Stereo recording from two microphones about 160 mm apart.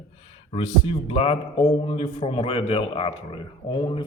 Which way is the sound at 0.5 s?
35° left (ahead or behind).